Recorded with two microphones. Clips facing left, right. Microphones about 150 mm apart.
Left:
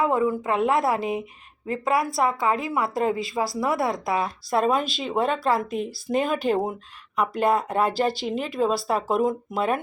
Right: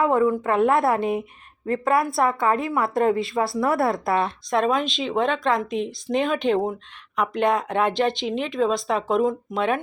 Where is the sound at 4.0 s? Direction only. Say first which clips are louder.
Right 3 dB; 25° right (ahead or behind).